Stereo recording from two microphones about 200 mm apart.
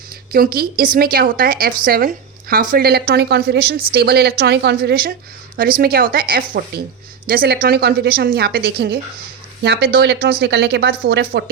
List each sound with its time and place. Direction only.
0.3 s a woman's voice: 50° right (ahead or behind)